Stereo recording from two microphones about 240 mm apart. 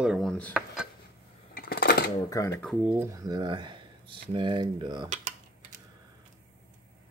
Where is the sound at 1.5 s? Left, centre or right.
Left.